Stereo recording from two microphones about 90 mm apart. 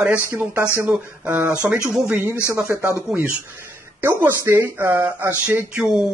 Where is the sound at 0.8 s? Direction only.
15° right (ahead or behind).